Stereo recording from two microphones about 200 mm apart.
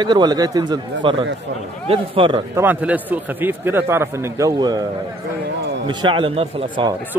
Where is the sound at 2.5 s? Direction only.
10° right (ahead or behind).